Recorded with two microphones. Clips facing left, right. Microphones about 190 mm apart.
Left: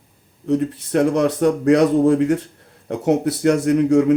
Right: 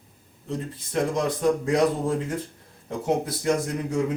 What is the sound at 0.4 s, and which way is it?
A man's voice, 70° left (ahead or behind).